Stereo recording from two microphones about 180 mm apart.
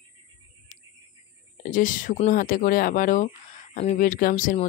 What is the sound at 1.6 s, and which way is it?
Speech, 45° left (ahead or behind).